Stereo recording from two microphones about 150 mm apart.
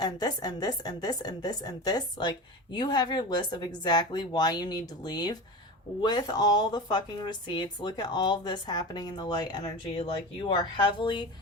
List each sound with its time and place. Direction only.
0.0 s speech: 25° left (ahead or behind)